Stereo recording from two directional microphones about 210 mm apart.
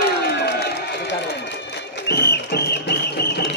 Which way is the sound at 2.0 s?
50° left (ahead or behind).